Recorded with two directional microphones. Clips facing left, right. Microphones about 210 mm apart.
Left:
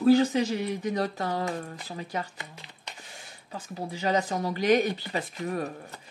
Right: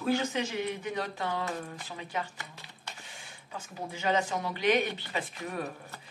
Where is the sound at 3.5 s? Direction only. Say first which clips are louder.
Left 4 dB; 35° left (ahead or behind).